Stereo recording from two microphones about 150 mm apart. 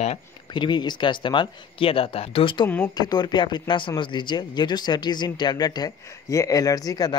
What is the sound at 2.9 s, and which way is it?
Speech, 30° left (ahead or behind).